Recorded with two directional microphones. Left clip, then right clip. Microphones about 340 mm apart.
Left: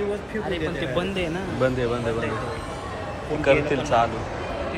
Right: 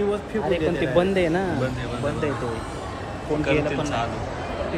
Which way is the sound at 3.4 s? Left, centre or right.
Centre.